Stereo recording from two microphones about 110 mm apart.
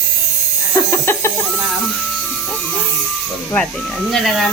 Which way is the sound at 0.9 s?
25° left (ahead or behind).